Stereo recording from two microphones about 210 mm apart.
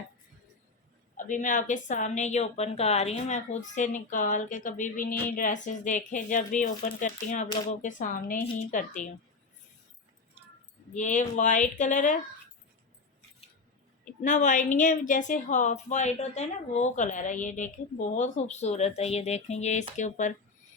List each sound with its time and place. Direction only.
1.1 s a woman's voice: 40° left (ahead or behind)
7.4 s speech: 20° left (ahead or behind)
7.8 s a woman's voice: 40° left (ahead or behind)
10.9 s a woman's voice: 35° left (ahead or behind)
14.0 s a woman's voice: 35° left (ahead or behind)